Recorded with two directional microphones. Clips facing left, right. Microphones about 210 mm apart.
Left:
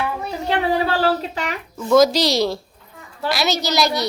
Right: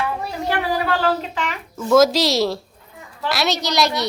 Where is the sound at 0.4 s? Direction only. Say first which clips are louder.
Left 2 dB; 25° left (ahead or behind).